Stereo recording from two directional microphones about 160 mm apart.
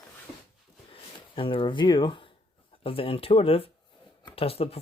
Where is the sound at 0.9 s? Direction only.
35° left (ahead or behind).